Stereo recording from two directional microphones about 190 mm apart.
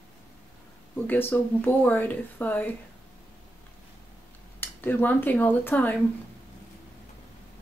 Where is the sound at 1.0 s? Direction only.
10° left (ahead or behind).